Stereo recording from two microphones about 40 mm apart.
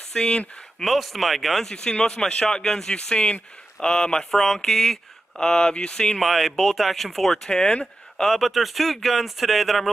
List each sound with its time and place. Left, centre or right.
0.1 s speech: centre
0.8 s speech: centre
1.7 s speech: centre
6.2 s speech: centre
7.4 s speech: left
8.3 s speech: centre